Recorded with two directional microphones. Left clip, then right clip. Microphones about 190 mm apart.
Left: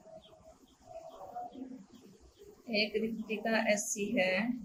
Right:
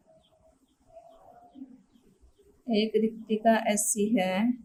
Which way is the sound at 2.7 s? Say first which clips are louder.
Right 6 dB; 40° right (ahead or behind).